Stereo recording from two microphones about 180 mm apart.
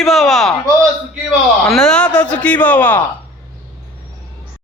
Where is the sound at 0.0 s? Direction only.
Centre (ahead or behind).